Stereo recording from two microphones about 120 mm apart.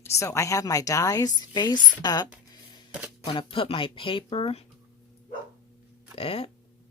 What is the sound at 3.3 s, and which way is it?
Speech, 45° left (ahead or behind).